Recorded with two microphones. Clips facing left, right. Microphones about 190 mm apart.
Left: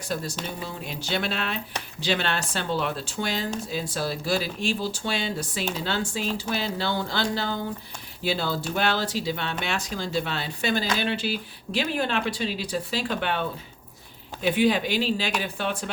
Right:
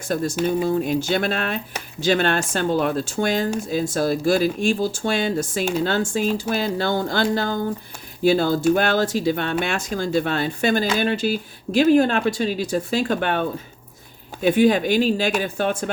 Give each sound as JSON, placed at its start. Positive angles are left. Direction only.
{"t": 0.1, "sound": "speech", "side_deg": -50}